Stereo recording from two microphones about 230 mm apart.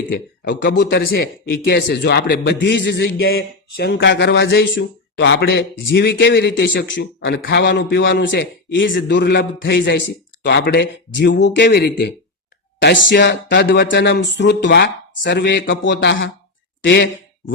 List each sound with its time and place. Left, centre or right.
0.1 s a man's voice: left